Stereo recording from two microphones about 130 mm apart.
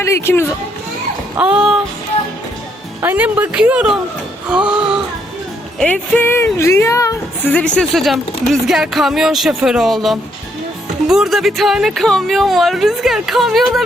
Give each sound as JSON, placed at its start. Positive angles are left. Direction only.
{"t": 0.0, "sound": "speech", "side_deg": 20}
{"t": 1.4, "sound": "speech", "side_deg": -5}
{"t": 3.0, "sound": "speech", "side_deg": -15}
{"t": 4.4, "sound": "a sound", "side_deg": -10}
{"t": 5.8, "sound": "speech", "side_deg": 15}
{"t": 7.5, "sound": "speech", "side_deg": 10}